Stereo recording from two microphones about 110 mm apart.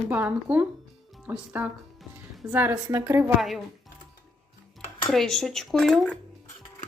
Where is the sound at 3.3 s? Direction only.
Centre (ahead or behind).